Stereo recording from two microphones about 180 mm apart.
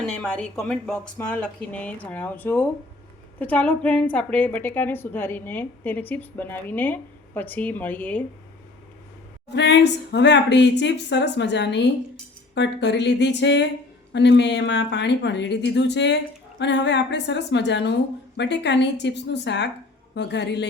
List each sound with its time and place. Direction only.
0.0 s a woman's voice: 5° left (ahead or behind)
9.5 s speech: 70° left (ahead or behind)